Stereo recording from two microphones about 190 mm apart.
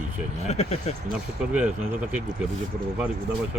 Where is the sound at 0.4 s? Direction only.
35° left (ahead or behind).